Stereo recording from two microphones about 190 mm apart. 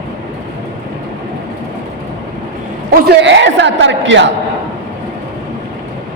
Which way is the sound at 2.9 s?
65° right (ahead or behind).